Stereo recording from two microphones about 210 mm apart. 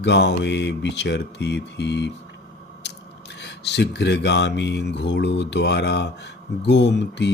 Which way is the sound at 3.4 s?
55° left (ahead or behind).